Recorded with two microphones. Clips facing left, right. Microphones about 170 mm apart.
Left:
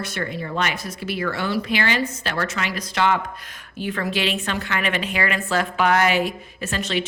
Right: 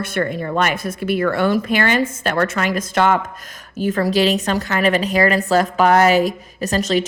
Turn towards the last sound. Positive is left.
turn(degrees=-40)  # may be behind; listen again after turning